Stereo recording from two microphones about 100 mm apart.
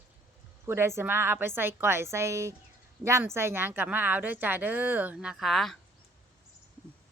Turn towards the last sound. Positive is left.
turn(degrees=0)  # may be behind; listen again after turning